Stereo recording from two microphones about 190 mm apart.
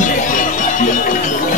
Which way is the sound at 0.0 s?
45° left (ahead or behind).